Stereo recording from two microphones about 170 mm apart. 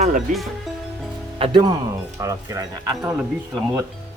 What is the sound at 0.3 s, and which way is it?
Speech, 50° right (ahead or behind).